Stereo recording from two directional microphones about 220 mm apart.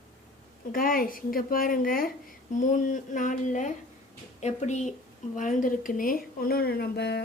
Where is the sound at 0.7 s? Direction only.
40° left (ahead or behind).